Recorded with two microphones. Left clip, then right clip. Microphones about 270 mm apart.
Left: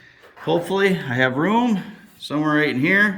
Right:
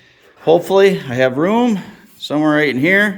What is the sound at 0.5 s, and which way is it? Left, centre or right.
Speech, centre.